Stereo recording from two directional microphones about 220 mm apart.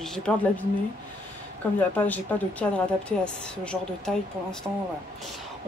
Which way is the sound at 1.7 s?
10° left (ahead or behind).